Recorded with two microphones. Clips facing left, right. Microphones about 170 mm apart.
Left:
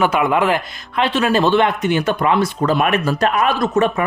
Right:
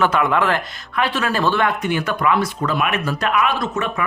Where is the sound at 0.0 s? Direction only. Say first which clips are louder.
Left 2 dB; 15° left (ahead or behind).